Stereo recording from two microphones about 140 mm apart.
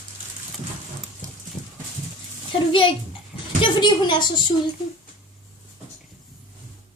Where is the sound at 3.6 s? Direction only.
35° left (ahead or behind).